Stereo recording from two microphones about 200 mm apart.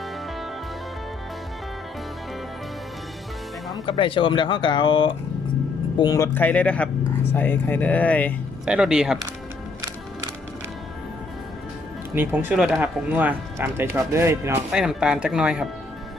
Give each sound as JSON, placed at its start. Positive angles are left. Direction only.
{"t": 3.7, "sound": "speech", "side_deg": 25}
{"t": 8.6, "sound": "speech", "side_deg": -5}
{"t": 12.1, "sound": "speech", "side_deg": -10}